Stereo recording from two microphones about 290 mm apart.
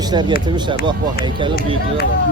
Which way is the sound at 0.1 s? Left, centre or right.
Centre.